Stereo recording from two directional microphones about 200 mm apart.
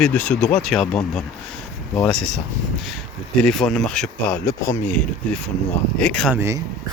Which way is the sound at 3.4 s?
Centre (ahead or behind).